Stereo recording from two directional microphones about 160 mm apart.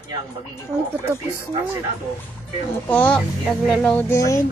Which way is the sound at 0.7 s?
15° right (ahead or behind).